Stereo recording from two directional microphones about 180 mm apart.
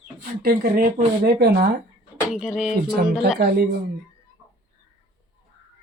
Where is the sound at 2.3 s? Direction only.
Centre (ahead or behind).